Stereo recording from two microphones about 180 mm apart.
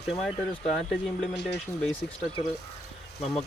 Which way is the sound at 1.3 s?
75° left (ahead or behind).